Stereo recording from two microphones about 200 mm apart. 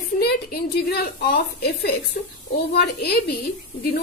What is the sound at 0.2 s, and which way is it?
A woman's voice, 50° left (ahead or behind).